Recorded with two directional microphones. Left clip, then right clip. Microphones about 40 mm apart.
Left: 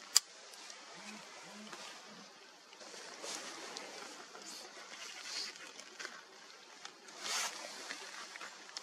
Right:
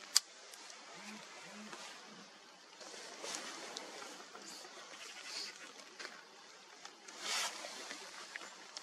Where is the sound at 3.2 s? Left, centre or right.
Centre.